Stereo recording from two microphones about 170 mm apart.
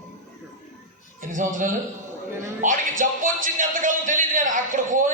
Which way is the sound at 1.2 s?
50° right (ahead or behind).